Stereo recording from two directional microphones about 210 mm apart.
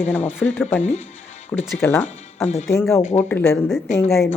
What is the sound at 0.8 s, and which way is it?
Speech, 35° left (ahead or behind).